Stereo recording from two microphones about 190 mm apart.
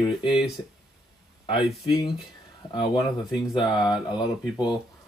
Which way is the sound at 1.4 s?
25° left (ahead or behind).